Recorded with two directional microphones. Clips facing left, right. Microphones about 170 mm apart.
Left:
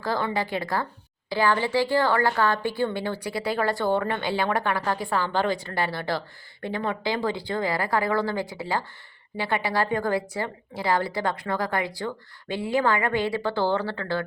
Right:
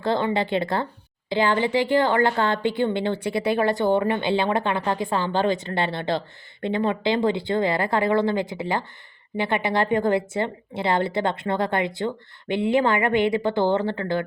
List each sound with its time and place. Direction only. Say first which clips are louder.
0.0 s speech: right 4 dB; 20° right (ahead or behind)